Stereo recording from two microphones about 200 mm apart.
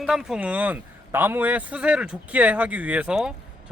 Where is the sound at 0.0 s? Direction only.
Centre (ahead or behind).